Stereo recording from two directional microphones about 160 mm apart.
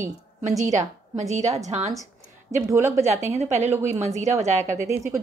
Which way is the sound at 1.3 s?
45° right (ahead or behind).